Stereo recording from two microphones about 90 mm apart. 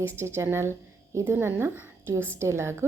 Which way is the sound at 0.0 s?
30° right (ahead or behind).